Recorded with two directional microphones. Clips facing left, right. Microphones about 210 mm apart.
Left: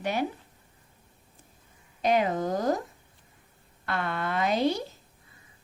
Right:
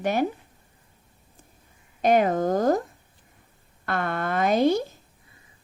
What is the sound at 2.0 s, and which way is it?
Speech, 50° right (ahead or behind).